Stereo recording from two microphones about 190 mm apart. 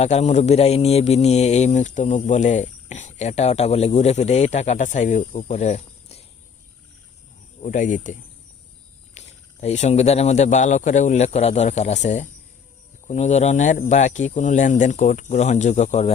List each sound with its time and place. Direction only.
0.0 s speech: 35° left (ahead or behind)
7.6 s speech: 40° left (ahead or behind)